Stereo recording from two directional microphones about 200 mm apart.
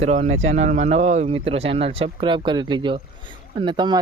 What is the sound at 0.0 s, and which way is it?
Speech, 35° right (ahead or behind).